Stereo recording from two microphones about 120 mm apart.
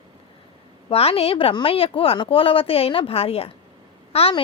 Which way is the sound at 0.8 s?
55° left (ahead or behind).